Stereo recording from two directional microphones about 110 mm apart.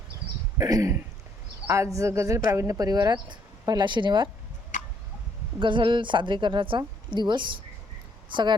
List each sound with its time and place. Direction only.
0.6 s speech: 30° right (ahead or behind)
4.7 s a sound: 90° left
5.5 s a woman's voice: 45° right (ahead or behind)